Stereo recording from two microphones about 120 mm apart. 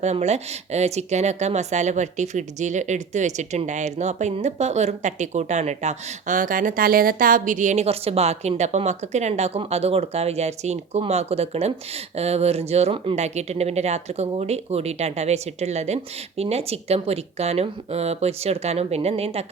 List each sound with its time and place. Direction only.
0.0 s a woman's voice: 70° right (ahead or behind); by 7.9 s 85° right
7.9 s speech: 55° right (ahead or behind)
13.1 s speech: 70° right (ahead or behind)